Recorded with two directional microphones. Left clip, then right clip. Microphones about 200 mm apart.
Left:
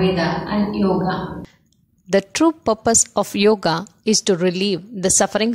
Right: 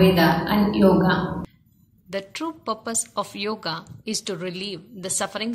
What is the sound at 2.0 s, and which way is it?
A woman's voice, 50° left (ahead or behind).